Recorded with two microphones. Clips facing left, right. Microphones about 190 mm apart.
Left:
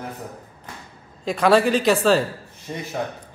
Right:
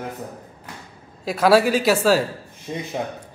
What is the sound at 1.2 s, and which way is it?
A man's voice, 5° right (ahead or behind).